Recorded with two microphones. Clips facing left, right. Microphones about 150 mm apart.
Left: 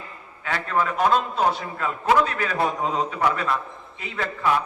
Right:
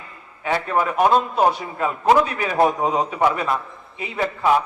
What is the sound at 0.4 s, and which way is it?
A man's voice, 20° right (ahead or behind).